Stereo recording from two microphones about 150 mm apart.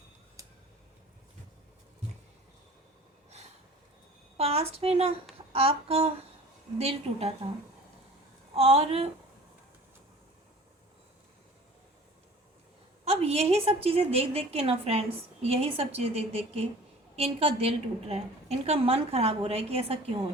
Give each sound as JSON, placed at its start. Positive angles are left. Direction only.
{"t": 3.2, "sound": "a sound", "side_deg": -50}
{"t": 4.4, "sound": "a woman's voice", "side_deg": -40}
{"t": 8.5, "sound": "a woman's voice", "side_deg": -40}
{"t": 13.1, "sound": "a woman's voice", "side_deg": -45}